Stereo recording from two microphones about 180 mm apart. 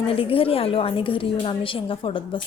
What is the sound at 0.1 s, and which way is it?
A woman's voice, 30° left (ahead or behind).